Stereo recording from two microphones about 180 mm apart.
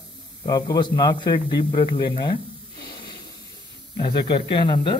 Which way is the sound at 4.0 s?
25° left (ahead or behind).